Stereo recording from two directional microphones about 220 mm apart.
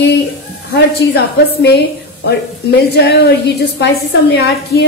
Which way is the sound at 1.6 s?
50° left (ahead or behind).